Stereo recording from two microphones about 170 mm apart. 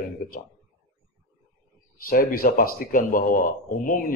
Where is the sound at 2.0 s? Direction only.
60° left (ahead or behind).